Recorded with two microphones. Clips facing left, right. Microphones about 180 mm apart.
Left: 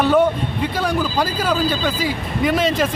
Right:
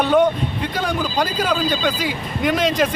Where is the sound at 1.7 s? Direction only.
5° left (ahead or behind).